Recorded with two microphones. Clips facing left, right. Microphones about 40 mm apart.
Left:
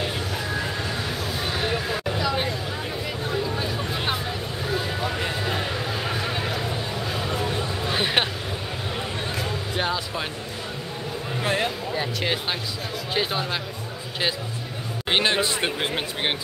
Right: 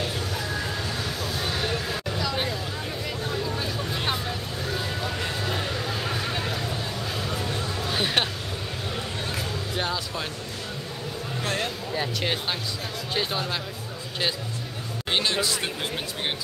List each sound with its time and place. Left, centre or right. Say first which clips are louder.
0.0 s vehicle: left 2 dB; centre
1.2 s a sound: left 1 dB; centre
9.4 s music: left 3 dB; centre
11.4 s a sound: left 5 dB; centre
13.1 s speech: left 2 dB; centre
15.0 s speech: left 3 dB; left